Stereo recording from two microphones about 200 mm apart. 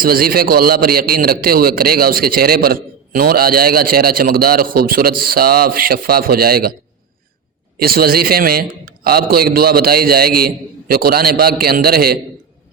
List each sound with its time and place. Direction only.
0.0 s a man's voice: 50° right (ahead or behind)
7.8 s a man's voice: 50° right (ahead or behind)